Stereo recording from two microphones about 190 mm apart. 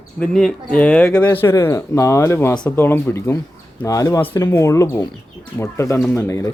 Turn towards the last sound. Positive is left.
turn(degrees=15)  # may be behind; listen again after turning